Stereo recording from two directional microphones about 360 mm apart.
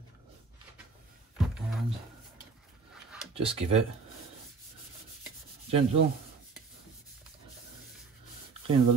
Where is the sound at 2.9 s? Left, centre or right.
Centre.